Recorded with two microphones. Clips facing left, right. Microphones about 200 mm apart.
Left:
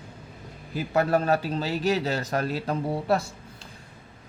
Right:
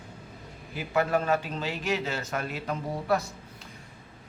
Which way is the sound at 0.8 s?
40° left (ahead or behind).